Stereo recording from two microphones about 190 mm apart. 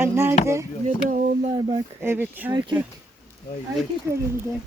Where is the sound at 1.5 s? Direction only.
25° right (ahead or behind).